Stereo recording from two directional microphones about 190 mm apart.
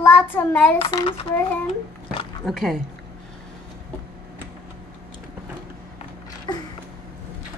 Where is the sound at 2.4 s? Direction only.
Centre (ahead or behind).